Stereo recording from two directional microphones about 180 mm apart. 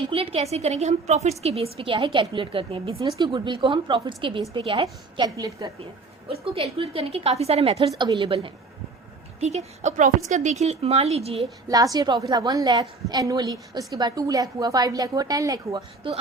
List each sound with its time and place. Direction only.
0.1 s a woman's voice: 30° right (ahead or behind)
11.7 s a woman's voice: 20° right (ahead or behind)